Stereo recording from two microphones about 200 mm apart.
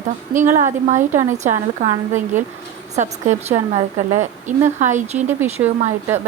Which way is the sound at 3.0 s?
35° right (ahead or behind).